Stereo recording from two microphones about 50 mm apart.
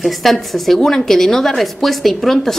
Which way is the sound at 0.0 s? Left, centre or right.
Centre.